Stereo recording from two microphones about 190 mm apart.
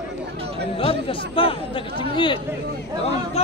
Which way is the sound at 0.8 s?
30° left (ahead or behind).